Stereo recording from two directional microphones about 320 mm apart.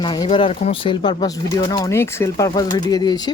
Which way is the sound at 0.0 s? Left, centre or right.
Centre.